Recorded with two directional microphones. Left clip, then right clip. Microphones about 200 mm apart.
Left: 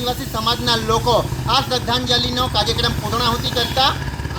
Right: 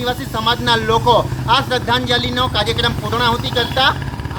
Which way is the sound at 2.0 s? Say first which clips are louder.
Right 2 dB; 25° right (ahead or behind).